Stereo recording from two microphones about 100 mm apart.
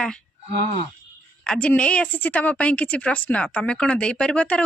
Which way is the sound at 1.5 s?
15° left (ahead or behind).